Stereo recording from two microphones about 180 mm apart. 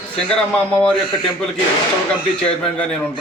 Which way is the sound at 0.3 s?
5° left (ahead or behind).